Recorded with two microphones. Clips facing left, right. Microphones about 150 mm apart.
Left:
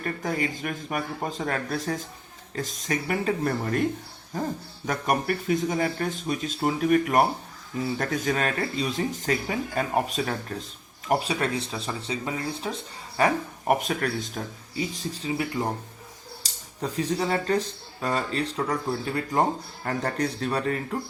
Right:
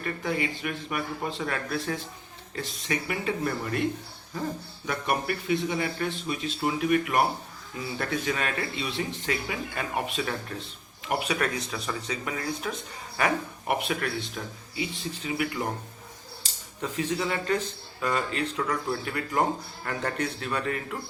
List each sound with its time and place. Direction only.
0.0 s speech: 40° left (ahead or behind)
4.9 s speech: 40° left (ahead or behind)